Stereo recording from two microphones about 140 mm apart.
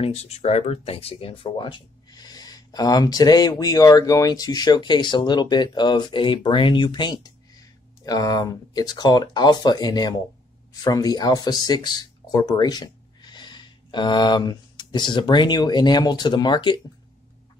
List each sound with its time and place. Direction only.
0.0 s speech: 45° left (ahead or behind)